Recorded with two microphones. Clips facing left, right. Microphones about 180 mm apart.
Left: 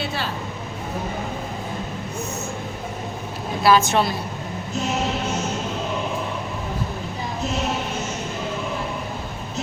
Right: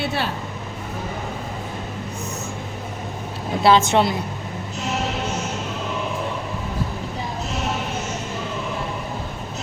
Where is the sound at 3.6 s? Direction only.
25° right (ahead or behind).